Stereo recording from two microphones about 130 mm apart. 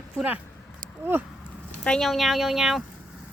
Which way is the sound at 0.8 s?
90° right.